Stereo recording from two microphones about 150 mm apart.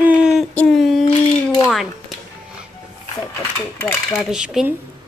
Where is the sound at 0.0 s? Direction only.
10° right (ahead or behind).